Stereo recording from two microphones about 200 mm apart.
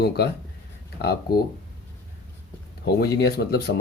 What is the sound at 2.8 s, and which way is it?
Speech, 50° left (ahead or behind).